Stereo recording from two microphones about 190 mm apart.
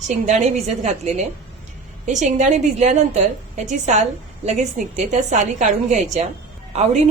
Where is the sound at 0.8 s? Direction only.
40° right (ahead or behind).